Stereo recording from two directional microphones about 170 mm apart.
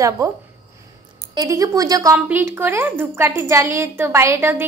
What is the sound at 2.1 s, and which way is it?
A woman's voice, 10° right (ahead or behind).